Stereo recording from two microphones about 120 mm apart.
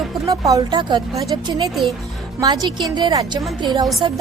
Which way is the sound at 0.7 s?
40° right (ahead or behind).